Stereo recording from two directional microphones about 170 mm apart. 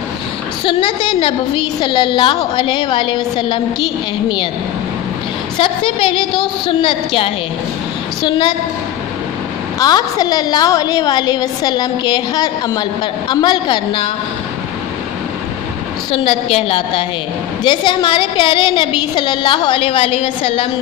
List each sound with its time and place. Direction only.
0.7 s a woman's voice: 30° left (ahead or behind)
5.6 s a woman's voice: 30° left (ahead or behind)
9.8 s a woman's voice: 20° left (ahead or behind)
16.1 s a woman's voice: 35° left (ahead or behind)